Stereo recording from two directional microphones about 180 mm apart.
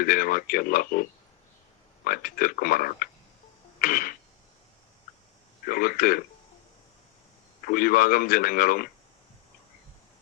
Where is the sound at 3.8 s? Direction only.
50° left (ahead or behind).